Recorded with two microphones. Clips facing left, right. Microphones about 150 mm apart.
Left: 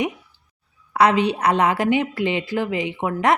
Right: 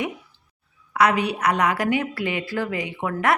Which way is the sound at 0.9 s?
25° left (ahead or behind).